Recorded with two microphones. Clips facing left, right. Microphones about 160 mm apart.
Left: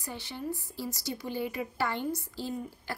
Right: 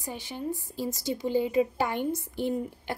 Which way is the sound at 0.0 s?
15° right (ahead or behind).